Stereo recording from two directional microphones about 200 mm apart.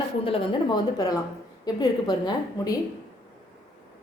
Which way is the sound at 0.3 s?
25° left (ahead or behind).